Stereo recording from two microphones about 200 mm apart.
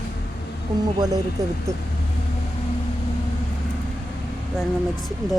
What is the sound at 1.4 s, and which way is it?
Speech, 15° right (ahead or behind).